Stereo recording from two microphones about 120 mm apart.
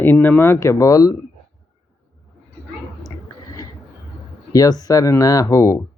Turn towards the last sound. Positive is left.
turn(degrees=25)  # may be behind; listen again after turning